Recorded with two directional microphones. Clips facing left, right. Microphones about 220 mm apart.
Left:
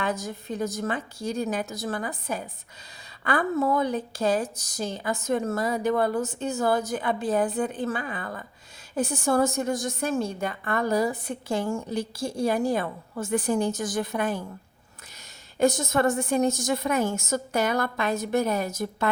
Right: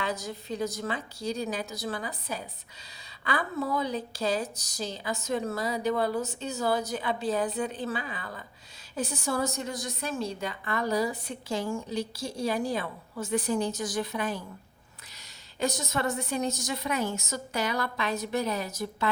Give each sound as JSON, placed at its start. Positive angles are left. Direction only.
{"t": 0.0, "sound": "a woman's voice", "side_deg": 50}
{"t": 15.5, "sound": "a woman's voice", "side_deg": 50}